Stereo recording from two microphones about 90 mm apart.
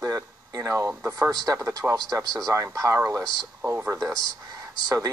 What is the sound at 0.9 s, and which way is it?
Speech, 20° right (ahead or behind).